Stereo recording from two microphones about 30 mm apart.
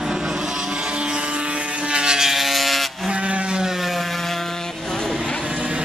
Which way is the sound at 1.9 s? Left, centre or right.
Right.